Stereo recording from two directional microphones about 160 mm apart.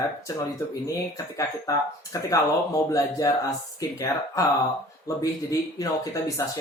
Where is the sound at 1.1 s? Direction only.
20° left (ahead or behind).